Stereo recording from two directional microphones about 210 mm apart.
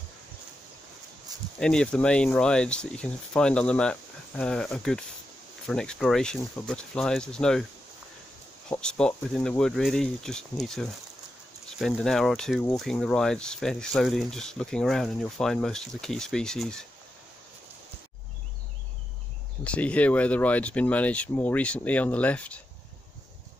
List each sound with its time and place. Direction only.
1.3 s a sound: 20° right (ahead or behind)
1.6 s speech: 5° left (ahead or behind)
8.6 s speech: 5° left (ahead or behind)
19.6 s speech: 5° left (ahead or behind)